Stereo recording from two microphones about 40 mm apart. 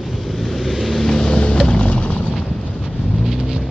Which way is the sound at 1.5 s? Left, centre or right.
Left.